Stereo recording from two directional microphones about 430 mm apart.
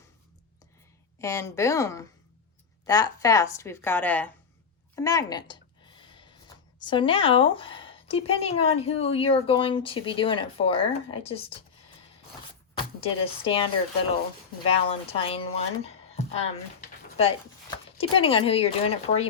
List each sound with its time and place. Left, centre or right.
1.2 s speech: centre
4.9 s a sound: centre
6.7 s speech: centre
12.7 s speech: centre
14.8 s speech: centre